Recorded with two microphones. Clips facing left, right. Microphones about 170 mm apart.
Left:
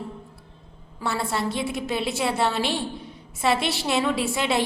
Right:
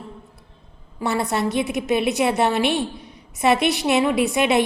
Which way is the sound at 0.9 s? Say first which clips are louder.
Right 4 dB; 20° right (ahead or behind).